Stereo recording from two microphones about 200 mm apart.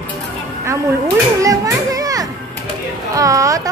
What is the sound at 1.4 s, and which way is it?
Children playing, 15° right (ahead or behind).